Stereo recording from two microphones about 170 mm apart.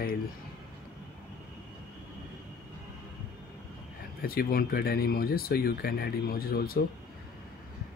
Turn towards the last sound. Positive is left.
turn(degrees=60)  # may be behind; listen again after turning